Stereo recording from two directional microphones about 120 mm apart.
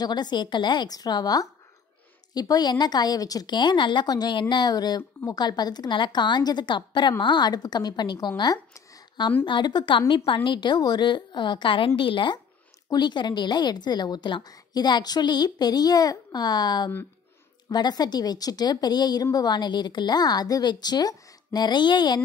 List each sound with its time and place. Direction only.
0.0 s a woman's voice: 35° left (ahead or behind)
8.4 s a sound: 35° left (ahead or behind)
9.4 s a woman's voice: 40° left (ahead or behind)